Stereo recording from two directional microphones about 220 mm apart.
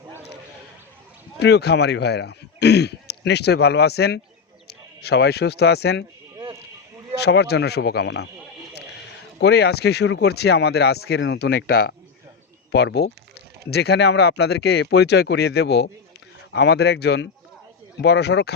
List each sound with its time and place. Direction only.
1.4 s speech: 50° left (ahead or behind)
6.3 s a sound: 15° right (ahead or behind)
7.2 s speech: 50° left (ahead or behind)
9.4 s speech: 50° left (ahead or behind)